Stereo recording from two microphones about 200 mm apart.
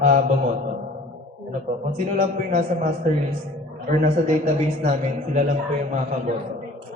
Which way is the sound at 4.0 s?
35° right (ahead or behind).